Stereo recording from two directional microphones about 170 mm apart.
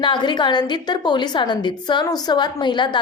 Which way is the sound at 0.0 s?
25° left (ahead or behind).